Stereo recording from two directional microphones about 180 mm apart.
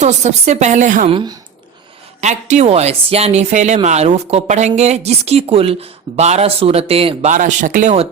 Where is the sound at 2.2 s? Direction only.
40° right (ahead or behind).